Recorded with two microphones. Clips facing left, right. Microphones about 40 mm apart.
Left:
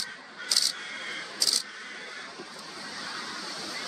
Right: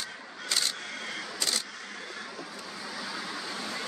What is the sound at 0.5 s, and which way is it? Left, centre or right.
Crow, right.